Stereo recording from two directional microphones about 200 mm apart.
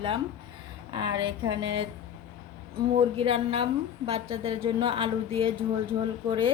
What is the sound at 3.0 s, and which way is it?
A woman's voice, 30° right (ahead or behind).